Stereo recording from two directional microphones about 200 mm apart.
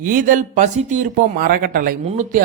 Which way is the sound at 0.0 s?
40° right (ahead or behind).